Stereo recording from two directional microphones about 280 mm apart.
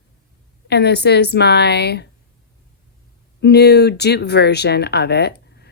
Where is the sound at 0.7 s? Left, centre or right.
Left.